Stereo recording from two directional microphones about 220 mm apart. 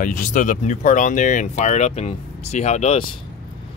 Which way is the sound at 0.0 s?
35° left (ahead or behind).